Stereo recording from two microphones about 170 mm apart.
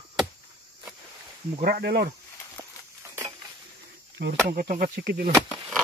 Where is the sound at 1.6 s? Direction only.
65° right (ahead or behind).